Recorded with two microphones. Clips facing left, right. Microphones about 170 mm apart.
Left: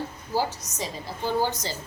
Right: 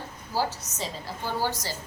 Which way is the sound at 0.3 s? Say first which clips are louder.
Left 2 dB; 15° left (ahead or behind).